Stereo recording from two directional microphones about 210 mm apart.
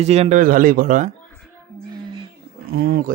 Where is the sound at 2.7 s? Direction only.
45° right (ahead or behind).